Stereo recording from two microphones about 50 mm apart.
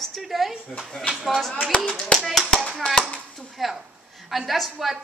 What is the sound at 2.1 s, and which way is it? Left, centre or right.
Speech, centre.